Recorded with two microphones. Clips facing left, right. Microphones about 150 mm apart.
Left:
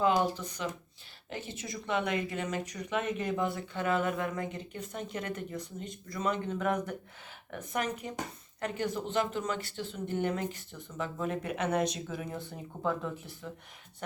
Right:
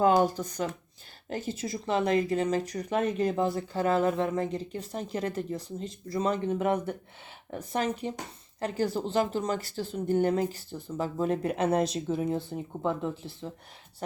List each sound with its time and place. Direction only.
0.0 s speech: 45° right (ahead or behind); by 13.5 s 25° right (ahead or behind)